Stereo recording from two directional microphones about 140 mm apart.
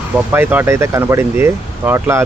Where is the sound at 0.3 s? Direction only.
15° right (ahead or behind).